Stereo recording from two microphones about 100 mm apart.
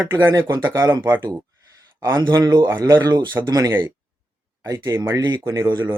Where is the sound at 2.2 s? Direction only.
50° right (ahead or behind); by 5.2 s 25° right (ahead or behind).